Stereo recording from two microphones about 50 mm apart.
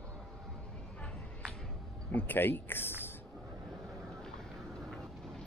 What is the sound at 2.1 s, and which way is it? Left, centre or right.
Speech, left.